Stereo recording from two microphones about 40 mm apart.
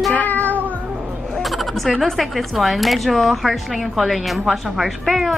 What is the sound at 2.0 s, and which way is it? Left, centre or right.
Speech, centre.